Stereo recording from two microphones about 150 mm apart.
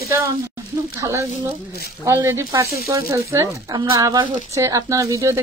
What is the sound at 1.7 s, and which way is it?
Speech, 90° left.